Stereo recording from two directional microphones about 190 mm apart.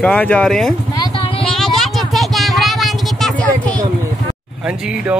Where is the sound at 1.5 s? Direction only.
Centre (ahead or behind).